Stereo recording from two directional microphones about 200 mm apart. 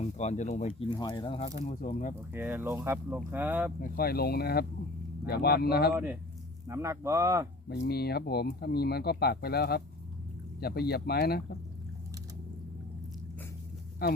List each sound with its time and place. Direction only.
0.0 s speech: 35° left (ahead or behind)
0.9 s speech: 20° left (ahead or behind)
1.6 s speech: 40° left (ahead or behind)
2.3 s speech: 10° right (ahead or behind)
3.8 s speech: 45° left (ahead or behind)
5.9 s speech: 10° right (ahead or behind)
7.7 s speech: 55° left (ahead or behind)
14.0 s speech: 50° left (ahead or behind)